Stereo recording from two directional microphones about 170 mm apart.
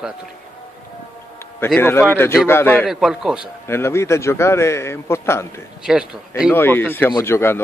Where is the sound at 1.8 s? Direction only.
15° left (ahead or behind).